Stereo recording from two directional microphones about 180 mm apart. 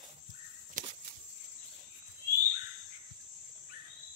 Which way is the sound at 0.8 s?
45° right (ahead or behind).